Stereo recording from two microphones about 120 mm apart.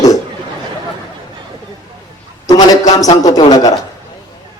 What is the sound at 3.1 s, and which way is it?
Speech, 40° left (ahead or behind).